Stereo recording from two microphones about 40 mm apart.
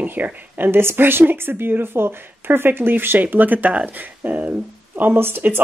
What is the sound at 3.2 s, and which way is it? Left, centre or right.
Speech, right.